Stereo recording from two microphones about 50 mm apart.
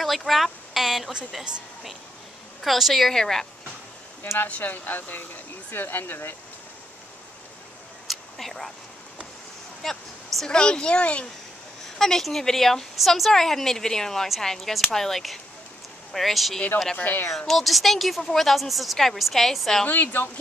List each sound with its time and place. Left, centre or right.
0.3 s a sound: centre
2.6 s speech: centre
4.5 s speech: left
8.1 s a sound: centre
9.8 s speech: centre; by 11.2 s left
12.0 s a woman's voice: centre
16.9 s speech: left
17.5 s speech: centre
19.9 s speech: left